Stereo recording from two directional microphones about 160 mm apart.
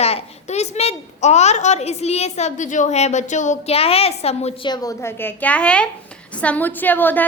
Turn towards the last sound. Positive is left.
turn(degrees=10)  # may be behind; listen again after turning